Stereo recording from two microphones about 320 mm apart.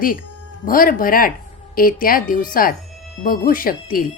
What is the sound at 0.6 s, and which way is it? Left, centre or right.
A woman's voice, left.